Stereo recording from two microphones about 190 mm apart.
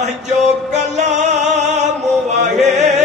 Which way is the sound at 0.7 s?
35° right (ahead or behind).